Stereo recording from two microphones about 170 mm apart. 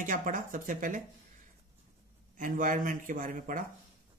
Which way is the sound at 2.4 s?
50° right (ahead or behind).